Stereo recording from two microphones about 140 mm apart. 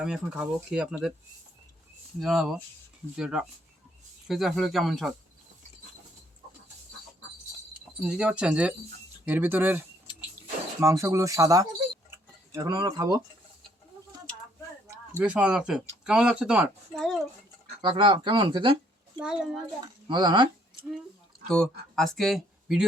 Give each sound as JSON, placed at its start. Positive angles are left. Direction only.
{"t": 0.0, "sound": "speech", "side_deg": -5}
{"t": 2.1, "sound": "speech", "side_deg": 0}
{"t": 7.9, "sound": "speech", "side_deg": -5}
{"t": 15.2, "sound": "speech", "side_deg": -10}
{"t": 17.7, "sound": "speech", "side_deg": -35}
{"t": 19.2, "sound": "speech", "side_deg": -5}
{"t": 19.8, "sound": "speech", "side_deg": -30}
{"t": 21.5, "sound": "speech", "side_deg": 5}